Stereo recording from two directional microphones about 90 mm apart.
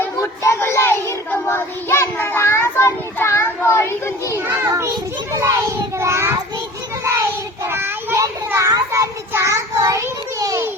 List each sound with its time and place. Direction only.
0.2 s child singing: 30° left (ahead or behind)
4.4 s a sound: 30° right (ahead or behind)
5.3 s child singing: 35° right (ahead or behind)
8.5 s child singing: 40° right (ahead or behind)